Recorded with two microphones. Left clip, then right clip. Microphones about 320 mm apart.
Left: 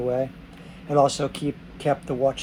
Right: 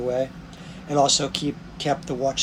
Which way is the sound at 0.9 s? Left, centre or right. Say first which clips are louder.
Even; centre.